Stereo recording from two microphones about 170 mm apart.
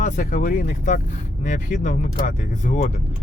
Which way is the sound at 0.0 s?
50° left (ahead or behind).